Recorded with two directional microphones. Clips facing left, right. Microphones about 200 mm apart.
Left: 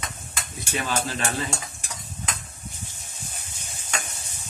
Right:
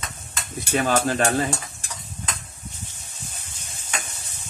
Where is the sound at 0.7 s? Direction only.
50° right (ahead or behind).